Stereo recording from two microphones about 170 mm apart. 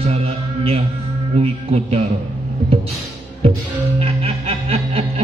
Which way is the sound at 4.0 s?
35° right (ahead or behind).